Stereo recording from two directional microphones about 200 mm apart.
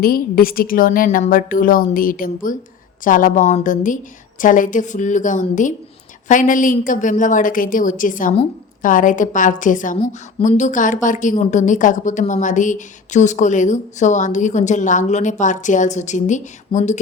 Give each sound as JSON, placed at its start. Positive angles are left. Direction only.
{"t": 0.0, "sound": "a woman's voice", "side_deg": 45}